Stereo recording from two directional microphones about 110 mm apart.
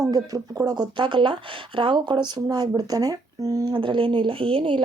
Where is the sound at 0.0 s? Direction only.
35° right (ahead or behind).